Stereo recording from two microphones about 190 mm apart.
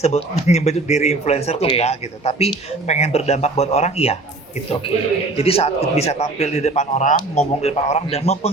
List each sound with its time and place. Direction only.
0.0 s a man's voice: 35° left (ahead or behind)
5.4 s a man's voice: 30° left (ahead or behind)